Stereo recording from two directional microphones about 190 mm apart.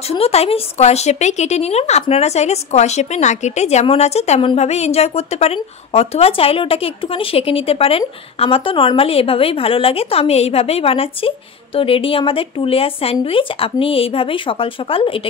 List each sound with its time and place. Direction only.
0.2 s a woman's voice: 30° left (ahead or behind)